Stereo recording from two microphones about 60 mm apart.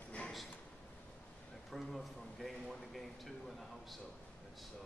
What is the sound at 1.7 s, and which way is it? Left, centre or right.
Speech, centre.